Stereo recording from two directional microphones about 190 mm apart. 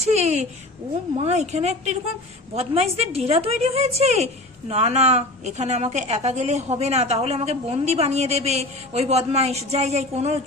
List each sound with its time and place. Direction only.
0.0 s a woman's voice: 35° right (ahead or behind)